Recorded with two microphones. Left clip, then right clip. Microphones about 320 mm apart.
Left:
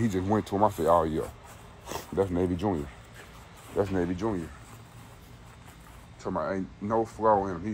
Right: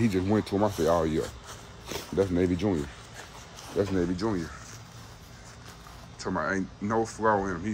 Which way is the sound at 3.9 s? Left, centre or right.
Centre.